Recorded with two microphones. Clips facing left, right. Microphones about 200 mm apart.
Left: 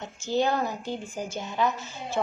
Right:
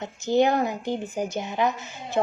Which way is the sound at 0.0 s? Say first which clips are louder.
Right 5 dB; 15° right (ahead or behind).